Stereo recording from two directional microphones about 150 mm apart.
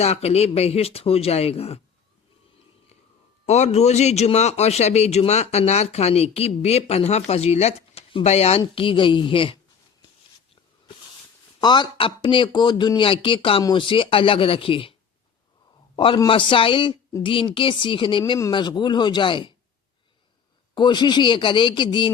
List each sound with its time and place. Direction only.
0.0 s a man's voice: 45° left (ahead or behind)
3.4 s a man's voice: 45° left (ahead or behind)
11.6 s a man's voice: 30° left (ahead or behind)
16.0 s a man's voice: 30° left (ahead or behind)
20.7 s a man's voice: 30° left (ahead or behind)